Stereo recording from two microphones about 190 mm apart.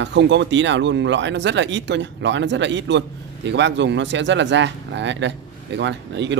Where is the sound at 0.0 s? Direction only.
70° right (ahead or behind).